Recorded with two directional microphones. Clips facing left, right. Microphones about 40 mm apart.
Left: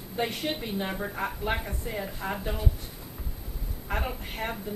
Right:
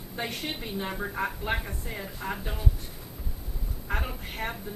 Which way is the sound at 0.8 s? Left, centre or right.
Centre.